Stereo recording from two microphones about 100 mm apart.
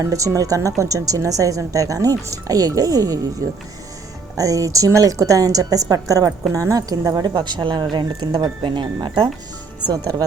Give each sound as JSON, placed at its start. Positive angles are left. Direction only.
{"t": 0.0, "sound": "speech", "side_deg": -30}
{"t": 4.4, "sound": "speech", "side_deg": -35}
{"t": 8.6, "sound": "speech", "side_deg": -50}